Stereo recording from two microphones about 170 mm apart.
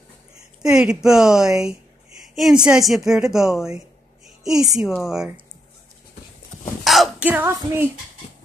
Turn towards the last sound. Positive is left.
turn(degrees=-15)  # may be behind; listen again after turning